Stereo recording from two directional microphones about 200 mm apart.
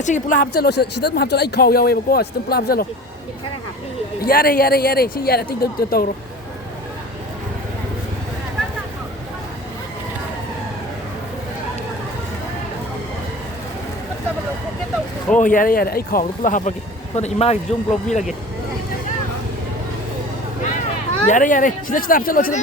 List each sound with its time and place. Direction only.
0.0 s speech: 40° left (ahead or behind)
4.3 s speech: 45° left (ahead or behind)
15.4 s speech: 40° left (ahead or behind)
21.2 s speech: 40° left (ahead or behind)